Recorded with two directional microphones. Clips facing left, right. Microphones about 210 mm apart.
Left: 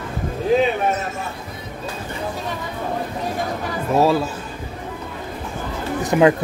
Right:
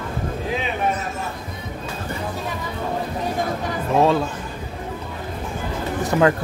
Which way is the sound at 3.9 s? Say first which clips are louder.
Left 1 dB; 5° left (ahead or behind).